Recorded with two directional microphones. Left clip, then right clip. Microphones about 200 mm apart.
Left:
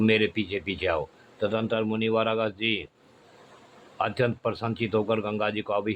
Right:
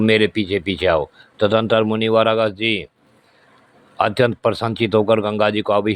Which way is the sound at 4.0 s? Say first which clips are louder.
Right 10 dB; 35° right (ahead or behind).